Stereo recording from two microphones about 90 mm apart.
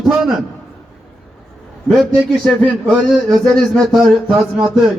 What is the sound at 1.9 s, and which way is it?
A man's voice, 5° left (ahead or behind).